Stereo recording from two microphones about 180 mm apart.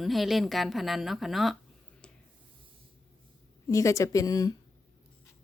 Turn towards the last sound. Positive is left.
turn(degrees=20)  # may be behind; listen again after turning